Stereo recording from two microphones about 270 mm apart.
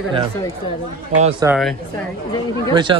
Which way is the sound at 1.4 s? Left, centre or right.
Centre.